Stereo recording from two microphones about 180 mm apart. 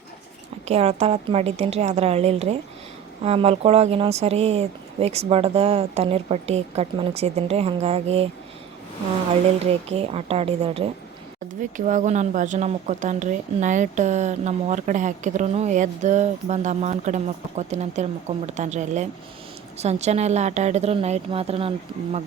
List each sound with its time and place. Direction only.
0.7 s a woman's voice: 35° right (ahead or behind)
9.6 s a woman's voice: 35° right (ahead or behind)
11.9 s a woman's voice: 40° right (ahead or behind)